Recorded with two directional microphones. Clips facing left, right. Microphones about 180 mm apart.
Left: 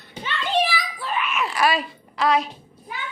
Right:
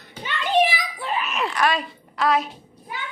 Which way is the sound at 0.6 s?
20° right (ahead or behind).